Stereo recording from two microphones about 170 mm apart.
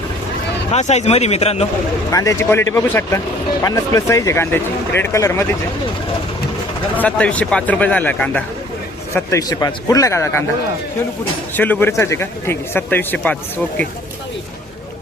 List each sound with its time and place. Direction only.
0.7 s speech: 40° left (ahead or behind)
2.0 s speech: 20° left (ahead or behind)
6.9 s speech: 10° left (ahead or behind)
9.1 s speech: 20° left (ahead or behind)
11.5 s speech: 10° left (ahead or behind)